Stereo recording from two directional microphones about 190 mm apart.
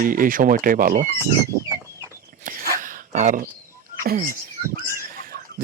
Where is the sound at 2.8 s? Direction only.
45° right (ahead or behind).